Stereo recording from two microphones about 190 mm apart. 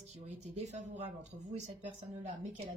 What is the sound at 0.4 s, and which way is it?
Speech, 40° right (ahead or behind).